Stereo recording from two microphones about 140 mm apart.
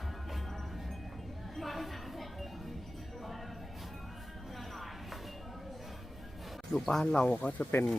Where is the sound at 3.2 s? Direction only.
Centre (ahead or behind).